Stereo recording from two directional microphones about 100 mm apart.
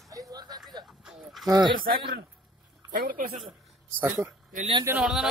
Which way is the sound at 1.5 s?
50° right (ahead or behind).